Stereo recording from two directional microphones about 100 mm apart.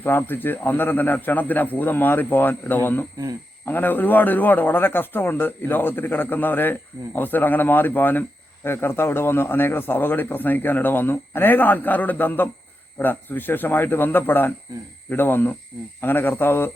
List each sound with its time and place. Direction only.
0.0 s speech: 20° left (ahead or behind)